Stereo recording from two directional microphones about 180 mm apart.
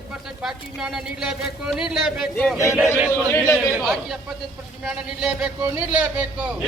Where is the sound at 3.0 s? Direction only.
15° left (ahead or behind).